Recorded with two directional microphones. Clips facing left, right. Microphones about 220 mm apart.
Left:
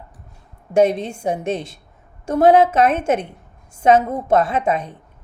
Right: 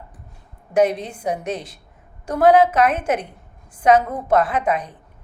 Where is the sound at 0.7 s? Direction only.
25° left (ahead or behind).